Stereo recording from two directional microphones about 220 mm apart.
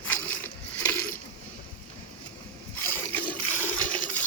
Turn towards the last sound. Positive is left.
turn(degrees=5)  # may be behind; listen again after turning